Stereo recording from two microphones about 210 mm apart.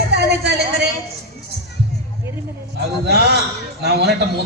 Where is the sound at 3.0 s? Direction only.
50° right (ahead or behind).